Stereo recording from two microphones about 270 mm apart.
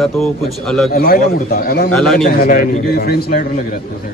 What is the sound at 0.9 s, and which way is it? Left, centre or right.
Speech, left.